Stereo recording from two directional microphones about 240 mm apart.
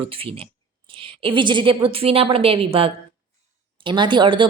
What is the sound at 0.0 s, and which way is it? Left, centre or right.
A woman's voice, right.